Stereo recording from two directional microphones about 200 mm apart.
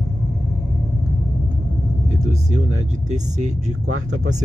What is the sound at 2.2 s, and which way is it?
Vehicle, 35° right (ahead or behind).